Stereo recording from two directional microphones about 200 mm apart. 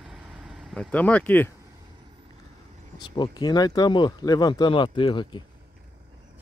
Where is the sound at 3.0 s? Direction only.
20° left (ahead or behind).